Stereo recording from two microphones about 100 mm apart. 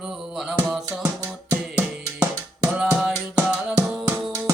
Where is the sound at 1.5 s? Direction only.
20° right (ahead or behind).